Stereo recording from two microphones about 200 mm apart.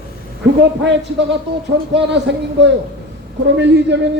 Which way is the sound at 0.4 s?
60° right (ahead or behind).